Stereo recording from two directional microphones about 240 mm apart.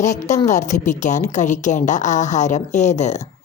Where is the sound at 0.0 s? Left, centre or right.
Left.